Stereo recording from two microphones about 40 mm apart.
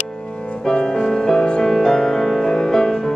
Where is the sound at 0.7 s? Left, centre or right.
Centre.